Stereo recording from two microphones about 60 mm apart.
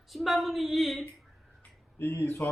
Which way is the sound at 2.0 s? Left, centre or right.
Left.